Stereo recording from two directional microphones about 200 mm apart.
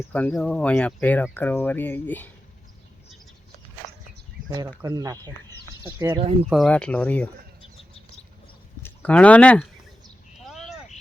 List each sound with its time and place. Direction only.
0.1 s speech: 5° left (ahead or behind)
4.4 s speech: 20° right (ahead or behind)
6.1 s speech: 30° right (ahead or behind)
6.5 s speech: 5° left (ahead or behind)
8.8 s speech: 10° left (ahead or behind)